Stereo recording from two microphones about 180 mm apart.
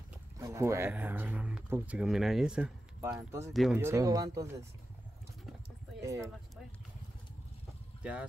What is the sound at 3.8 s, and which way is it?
Speech, 15° right (ahead or behind).